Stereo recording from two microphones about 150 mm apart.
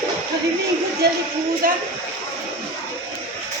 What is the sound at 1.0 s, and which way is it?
Speech, 90° right.